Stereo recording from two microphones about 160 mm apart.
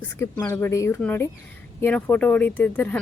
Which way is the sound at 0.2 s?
15° left (ahead or behind).